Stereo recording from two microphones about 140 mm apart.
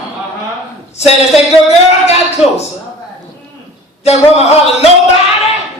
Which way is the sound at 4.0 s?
45° left (ahead or behind).